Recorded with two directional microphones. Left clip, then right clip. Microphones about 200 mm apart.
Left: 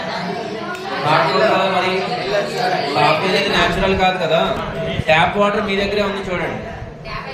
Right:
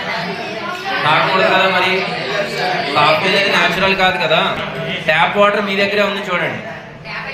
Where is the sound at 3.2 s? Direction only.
15° left (ahead or behind).